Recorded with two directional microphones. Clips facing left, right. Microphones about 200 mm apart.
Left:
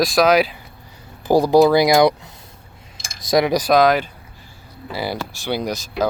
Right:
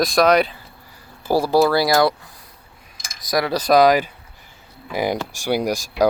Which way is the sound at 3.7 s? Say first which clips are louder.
Right 4 dB; 5° right (ahead or behind).